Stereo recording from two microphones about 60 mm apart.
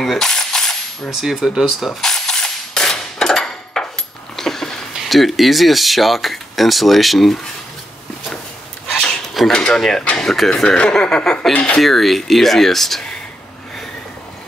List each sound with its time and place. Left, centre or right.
0.0 s cap gun: centre
1.1 s cap gun: centre
4.4 s a sound: centre
4.9 s speech: centre
9.0 s a sound: centre
9.5 s speech: centre
11.8 s speech: centre